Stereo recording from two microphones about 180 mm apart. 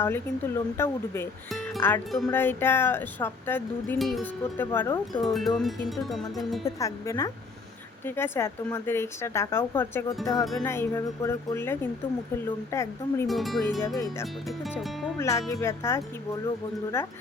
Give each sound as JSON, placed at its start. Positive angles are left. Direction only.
{"t": 0.0, "sound": "speech", "side_deg": 15}
{"t": 3.9, "sound": "speech", "side_deg": 0}
{"t": 4.5, "sound": "speech", "side_deg": 10}
{"t": 5.2, "sound": "speech", "side_deg": 0}
{"t": 6.7, "sound": "speech", "side_deg": 15}
{"t": 10.3, "sound": "speech", "side_deg": 0}
{"t": 10.7, "sound": "speech", "side_deg": 15}
{"t": 13.2, "sound": "speech", "side_deg": 0}
{"t": 13.8, "sound": "speech", "side_deg": 15}